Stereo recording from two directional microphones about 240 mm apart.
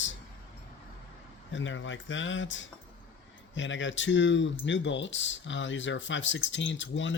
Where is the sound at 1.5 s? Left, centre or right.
Left.